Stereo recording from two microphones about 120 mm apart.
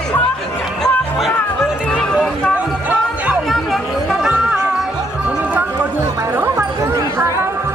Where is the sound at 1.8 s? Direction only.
10° left (ahead or behind).